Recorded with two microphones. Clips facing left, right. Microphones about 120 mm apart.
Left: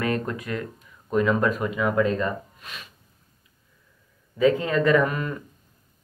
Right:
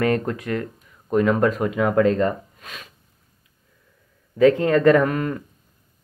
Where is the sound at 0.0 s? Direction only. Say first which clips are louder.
Right 5 dB; 60° right (ahead or behind).